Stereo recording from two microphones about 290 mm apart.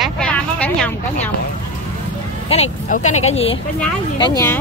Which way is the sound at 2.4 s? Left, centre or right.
Left.